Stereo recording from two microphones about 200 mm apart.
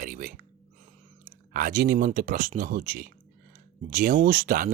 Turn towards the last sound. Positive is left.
turn(degrees=-45)  # may be behind; listen again after turning